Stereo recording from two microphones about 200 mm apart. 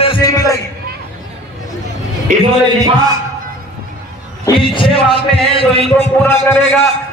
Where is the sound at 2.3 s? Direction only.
35° right (ahead or behind).